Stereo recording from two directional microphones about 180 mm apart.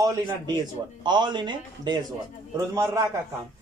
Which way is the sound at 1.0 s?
25° right (ahead or behind).